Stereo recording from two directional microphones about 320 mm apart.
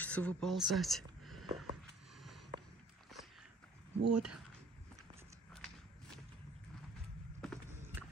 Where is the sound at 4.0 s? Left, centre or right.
Right.